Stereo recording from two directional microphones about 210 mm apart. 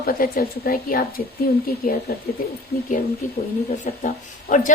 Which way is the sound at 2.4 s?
40° left (ahead or behind).